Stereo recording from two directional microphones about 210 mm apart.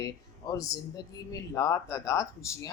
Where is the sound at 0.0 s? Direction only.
15° left (ahead or behind).